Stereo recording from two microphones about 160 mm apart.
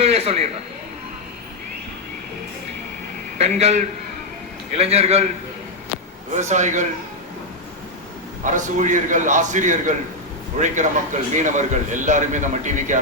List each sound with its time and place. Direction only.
0.0 s a sound: 40° right (ahead or behind)
3.3 s a man's voice: 40° right (ahead or behind)
6.3 s a man's voice: 50° right (ahead or behind)
8.4 s a man's voice: 50° right (ahead or behind)